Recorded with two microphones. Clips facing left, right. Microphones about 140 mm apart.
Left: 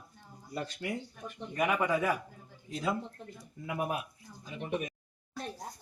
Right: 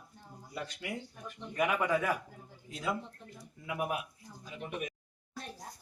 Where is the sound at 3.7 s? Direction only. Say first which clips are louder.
Left 1 dB; 30° left (ahead or behind).